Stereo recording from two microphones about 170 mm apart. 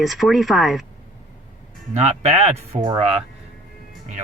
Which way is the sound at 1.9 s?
40° right (ahead or behind).